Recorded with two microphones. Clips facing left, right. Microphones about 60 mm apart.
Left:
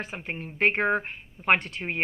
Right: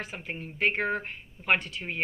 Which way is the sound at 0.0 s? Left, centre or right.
Left.